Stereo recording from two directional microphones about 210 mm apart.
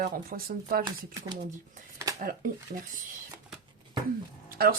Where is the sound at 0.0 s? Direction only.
45° right (ahead or behind).